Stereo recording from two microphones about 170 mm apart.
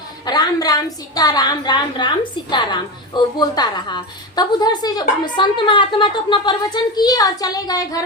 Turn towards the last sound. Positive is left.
turn(degrees=20)  # may be behind; listen again after turning